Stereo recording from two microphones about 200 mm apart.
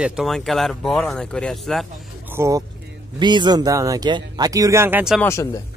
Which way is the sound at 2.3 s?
15° right (ahead or behind).